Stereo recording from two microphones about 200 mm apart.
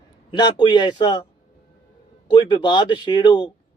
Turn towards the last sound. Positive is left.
turn(degrees=25)  # may be behind; listen again after turning